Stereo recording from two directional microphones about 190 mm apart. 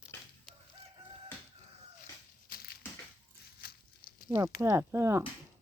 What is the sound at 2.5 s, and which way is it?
Crushing, 55° left (ahead or behind).